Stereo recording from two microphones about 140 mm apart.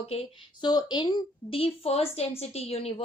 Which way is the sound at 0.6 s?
30° left (ahead or behind).